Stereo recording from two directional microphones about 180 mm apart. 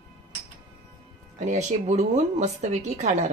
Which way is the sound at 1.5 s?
40° right (ahead or behind).